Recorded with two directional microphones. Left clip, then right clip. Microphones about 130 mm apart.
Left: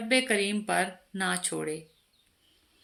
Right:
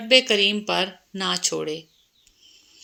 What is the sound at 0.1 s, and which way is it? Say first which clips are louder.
Speech: right 9 dB; 15° right (ahead or behind).